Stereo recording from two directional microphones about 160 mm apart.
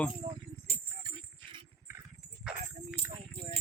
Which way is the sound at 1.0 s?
30° right (ahead or behind).